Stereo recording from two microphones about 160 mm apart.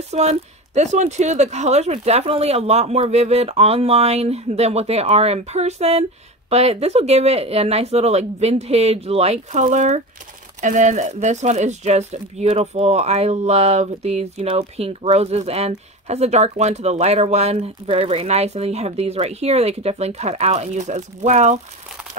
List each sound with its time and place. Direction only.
0.1 s a woman's voice: 40° right (ahead or behind)